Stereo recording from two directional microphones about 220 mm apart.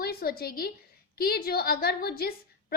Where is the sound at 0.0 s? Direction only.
45° left (ahead or behind).